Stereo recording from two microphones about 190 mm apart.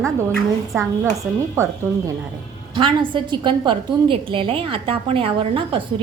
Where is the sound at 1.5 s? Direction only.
15° right (ahead or behind).